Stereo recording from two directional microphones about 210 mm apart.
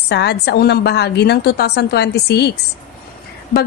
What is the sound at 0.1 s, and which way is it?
A woman's voice, 50° left (ahead or behind).